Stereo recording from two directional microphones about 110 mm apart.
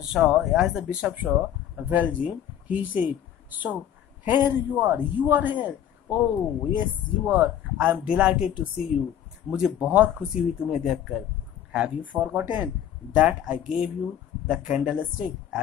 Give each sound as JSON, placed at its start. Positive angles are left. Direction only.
{"t": 0.0, "sound": "a man's voice", "side_deg": -10}